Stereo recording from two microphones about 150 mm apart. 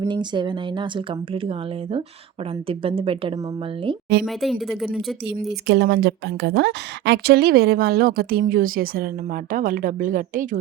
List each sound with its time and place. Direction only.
0.1 s speech: 30° right (ahead or behind)
4.3 s speech: centre (ahead or behind)
5.6 s a woman's voice: 90° right; by 10.6 s 65° right (ahead or behind)